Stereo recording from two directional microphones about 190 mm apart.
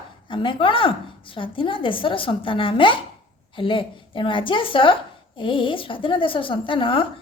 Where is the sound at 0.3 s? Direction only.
25° left (ahead or behind).